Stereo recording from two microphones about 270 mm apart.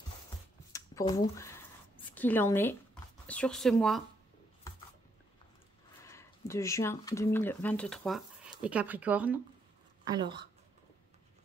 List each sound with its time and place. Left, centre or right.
0.7 s squish: centre
2.1 s speech: centre
6.0 s speech: centre
10.0 s a woman's voice: centre